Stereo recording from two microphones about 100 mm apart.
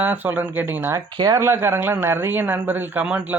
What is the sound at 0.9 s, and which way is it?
Speech, 35° right (ahead or behind).